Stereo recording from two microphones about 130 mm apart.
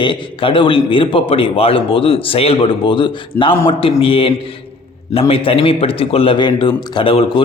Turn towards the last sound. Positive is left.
turn(degrees=45)  # may be behind; listen again after turning